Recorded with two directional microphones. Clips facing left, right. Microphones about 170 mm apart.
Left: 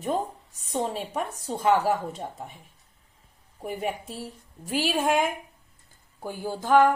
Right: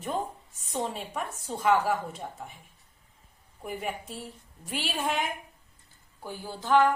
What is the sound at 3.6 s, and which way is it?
Speech, 40° left (ahead or behind).